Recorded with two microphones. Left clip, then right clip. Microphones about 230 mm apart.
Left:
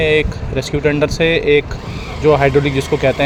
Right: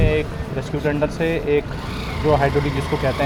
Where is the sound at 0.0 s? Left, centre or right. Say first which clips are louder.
Left 7 dB; left.